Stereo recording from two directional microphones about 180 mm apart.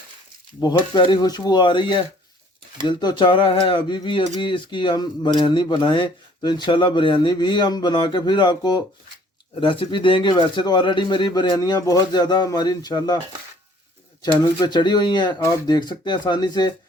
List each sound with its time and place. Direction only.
0.6 s speech: 25° left (ahead or behind)
14.6 s speech: 25° left (ahead or behind)